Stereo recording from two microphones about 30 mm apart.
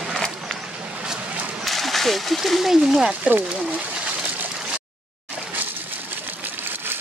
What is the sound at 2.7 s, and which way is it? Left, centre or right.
Speech, right.